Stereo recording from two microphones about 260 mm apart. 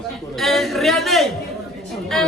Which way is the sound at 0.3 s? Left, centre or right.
Centre.